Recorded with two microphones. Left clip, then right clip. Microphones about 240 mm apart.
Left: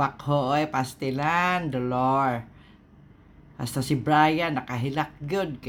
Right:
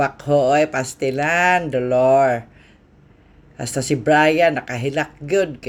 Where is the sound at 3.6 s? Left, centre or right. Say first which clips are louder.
Right 7 dB; centre.